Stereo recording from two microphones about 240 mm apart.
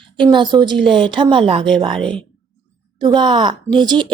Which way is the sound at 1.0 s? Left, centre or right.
Right.